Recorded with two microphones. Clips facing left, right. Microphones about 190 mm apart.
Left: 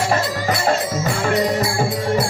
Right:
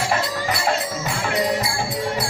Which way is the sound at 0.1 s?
40° left (ahead or behind).